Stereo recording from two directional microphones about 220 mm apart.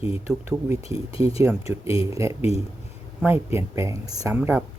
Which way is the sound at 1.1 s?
25° left (ahead or behind).